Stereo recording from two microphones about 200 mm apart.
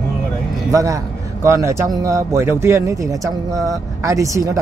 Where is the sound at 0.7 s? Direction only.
15° right (ahead or behind).